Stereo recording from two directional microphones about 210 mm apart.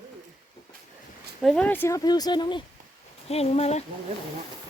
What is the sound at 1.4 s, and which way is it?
Speech, 5° left (ahead or behind).